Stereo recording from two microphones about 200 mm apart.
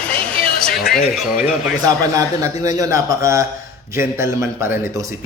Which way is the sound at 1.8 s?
15° right (ahead or behind).